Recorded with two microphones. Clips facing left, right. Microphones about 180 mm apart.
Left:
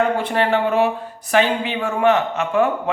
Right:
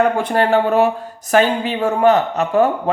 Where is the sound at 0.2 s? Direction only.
45° right (ahead or behind).